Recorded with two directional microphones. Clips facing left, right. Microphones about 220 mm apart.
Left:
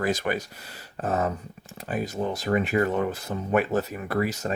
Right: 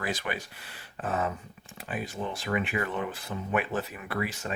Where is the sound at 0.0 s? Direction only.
45° left (ahead or behind).